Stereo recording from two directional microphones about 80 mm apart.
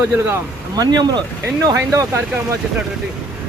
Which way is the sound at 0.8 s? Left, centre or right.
Right.